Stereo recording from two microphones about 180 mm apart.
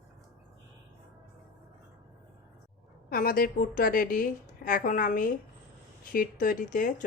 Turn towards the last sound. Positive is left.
turn(degrees=45)  # may be behind; listen again after turning